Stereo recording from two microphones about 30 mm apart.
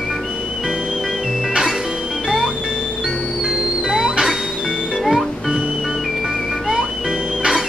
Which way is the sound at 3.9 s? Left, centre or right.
Right.